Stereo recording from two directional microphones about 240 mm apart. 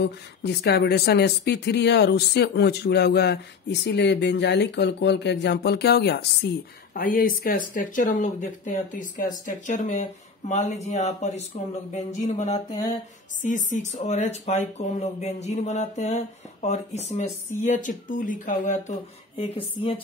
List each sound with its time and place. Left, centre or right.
0.0 s speech: left